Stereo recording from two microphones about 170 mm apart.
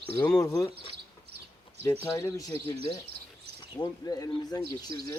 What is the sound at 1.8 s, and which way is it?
Speech, 10° left (ahead or behind).